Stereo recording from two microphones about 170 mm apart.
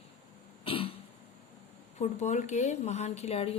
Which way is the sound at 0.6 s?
30° left (ahead or behind).